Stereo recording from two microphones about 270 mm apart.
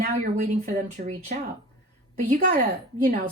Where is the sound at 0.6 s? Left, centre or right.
Right.